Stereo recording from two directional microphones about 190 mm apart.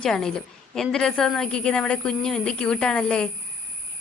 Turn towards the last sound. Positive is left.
turn(degrees=5)  # may be behind; listen again after turning